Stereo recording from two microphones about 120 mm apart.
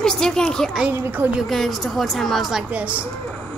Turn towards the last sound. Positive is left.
turn(degrees=-10)  # may be behind; listen again after turning